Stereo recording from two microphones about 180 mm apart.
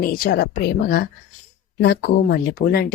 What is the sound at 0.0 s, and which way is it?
A woman's voice, 55° left (ahead or behind).